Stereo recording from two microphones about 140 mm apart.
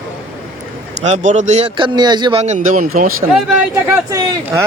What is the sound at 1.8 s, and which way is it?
Speech, 30° right (ahead or behind).